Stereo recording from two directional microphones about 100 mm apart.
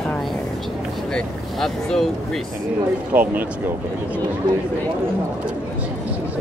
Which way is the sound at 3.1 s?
20° right (ahead or behind).